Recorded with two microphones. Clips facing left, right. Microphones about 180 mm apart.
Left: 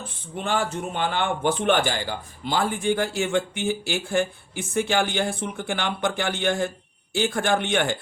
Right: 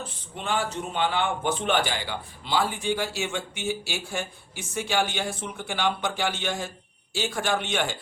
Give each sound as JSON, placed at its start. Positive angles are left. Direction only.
{"t": 0.3, "sound": "a man's voice", "side_deg": 45}